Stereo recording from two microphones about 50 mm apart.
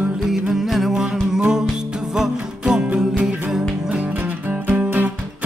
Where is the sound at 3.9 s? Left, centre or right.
Right.